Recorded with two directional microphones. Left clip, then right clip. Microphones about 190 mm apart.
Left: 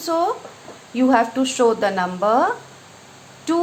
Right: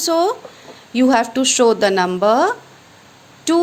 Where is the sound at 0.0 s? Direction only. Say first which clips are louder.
Right 4 dB; 55° right (ahead or behind).